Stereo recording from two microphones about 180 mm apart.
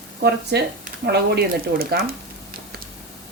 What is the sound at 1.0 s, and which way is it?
Speech, 65° right (ahead or behind).